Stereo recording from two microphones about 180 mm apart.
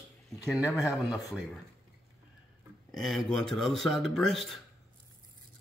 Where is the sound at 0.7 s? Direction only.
15° left (ahead or behind).